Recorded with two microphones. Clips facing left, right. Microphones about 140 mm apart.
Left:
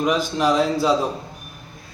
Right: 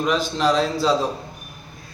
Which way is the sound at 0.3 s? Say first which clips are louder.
Left 1 dB; 15° left (ahead or behind).